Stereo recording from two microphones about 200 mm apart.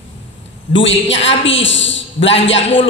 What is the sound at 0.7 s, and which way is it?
A man's voice, 65° left (ahead or behind).